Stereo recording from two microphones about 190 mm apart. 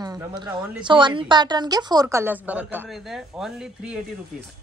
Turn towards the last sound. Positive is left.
turn(degrees=0)  # may be behind; listen again after turning